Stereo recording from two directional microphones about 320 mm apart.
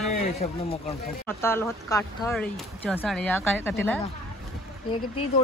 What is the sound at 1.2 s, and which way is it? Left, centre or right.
A woman's voice, centre.